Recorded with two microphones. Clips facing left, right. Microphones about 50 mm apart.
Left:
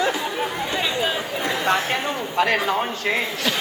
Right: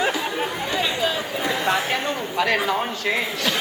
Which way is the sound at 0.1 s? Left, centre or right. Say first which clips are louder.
Even; centre.